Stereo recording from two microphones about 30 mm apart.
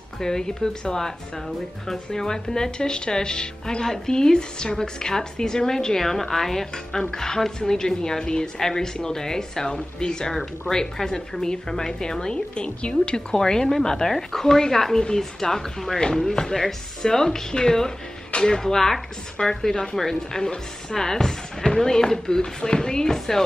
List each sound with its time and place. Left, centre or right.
0.2 s speech: left
13.3 s speech: centre
15.4 s speech: left